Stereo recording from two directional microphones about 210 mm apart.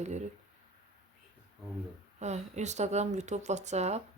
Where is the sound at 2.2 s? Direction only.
35° right (ahead or behind).